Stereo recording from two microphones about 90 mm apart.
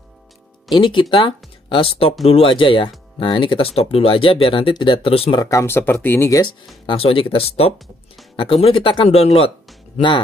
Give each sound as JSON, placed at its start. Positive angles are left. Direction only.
{"t": 0.7, "sound": "speech", "side_deg": 65}
{"t": 1.7, "sound": "speech", "side_deg": 85}
{"t": 5.4, "sound": "speech", "side_deg": 35}
{"t": 6.9, "sound": "speech", "side_deg": 85}
{"t": 8.4, "sound": "speech", "side_deg": 80}
{"t": 9.9, "sound": "speech", "side_deg": 65}